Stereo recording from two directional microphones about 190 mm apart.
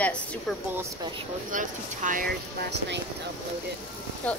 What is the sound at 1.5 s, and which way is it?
Speech, 45° right (ahead or behind).